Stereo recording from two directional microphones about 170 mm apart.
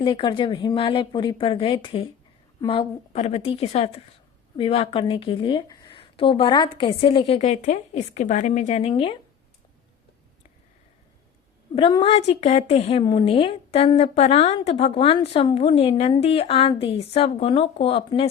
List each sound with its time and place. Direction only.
0.0 s a woman's voice: 30° left (ahead or behind)
11.7 s a woman's voice: 30° left (ahead or behind)